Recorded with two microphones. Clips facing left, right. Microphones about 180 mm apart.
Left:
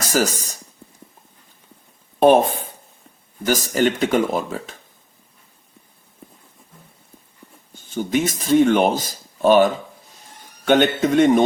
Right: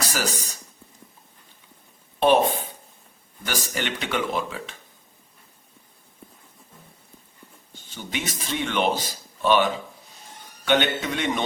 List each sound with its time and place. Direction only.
0.1 s speech: 45° left (ahead or behind)
2.1 s speech: 45° left (ahead or behind)
7.7 s speech: 45° left (ahead or behind)